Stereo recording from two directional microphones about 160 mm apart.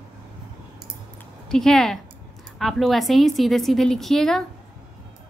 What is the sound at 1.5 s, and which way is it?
A woman's voice, 5° left (ahead or behind).